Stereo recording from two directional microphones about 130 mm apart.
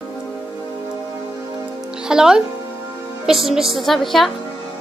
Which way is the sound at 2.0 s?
5° right (ahead or behind).